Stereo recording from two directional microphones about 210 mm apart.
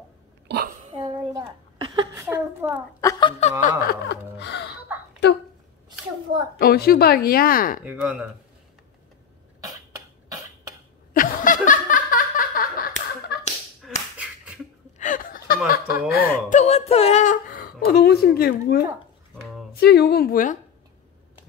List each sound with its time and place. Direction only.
0.5 s a sound: 40° right (ahead or behind)
0.9 s a sound: 25° right (ahead or behind)
2.1 s a woman's voice: 10° right (ahead or behind)
3.0 s speech: 20° left (ahead or behind)
3.8 s gasp: 50° left (ahead or behind)
6.6 s speech: 45° left (ahead or behind)
7.8 s a woman's voice: 5° right (ahead or behind)
11.1 s laughter: 40° left (ahead or behind)
13.8 s a sound: centre (ahead or behind)
15.0 s a sound: 40° left (ahead or behind)
15.7 s speech: 45° left (ahead or behind)
16.3 s speech: 35° left (ahead or behind)